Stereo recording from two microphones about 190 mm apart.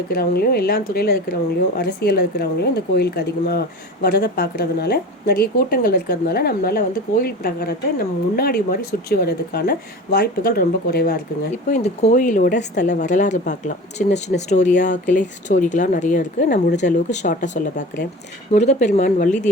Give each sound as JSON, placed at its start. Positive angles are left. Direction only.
{"t": 0.1, "sound": "a woman's voice", "side_deg": 55}
{"t": 11.5, "sound": "speech", "side_deg": 35}